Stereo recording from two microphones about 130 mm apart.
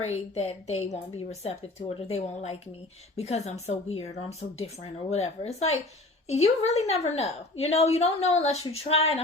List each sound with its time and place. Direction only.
0.1 s a woman's voice: 55° left (ahead or behind)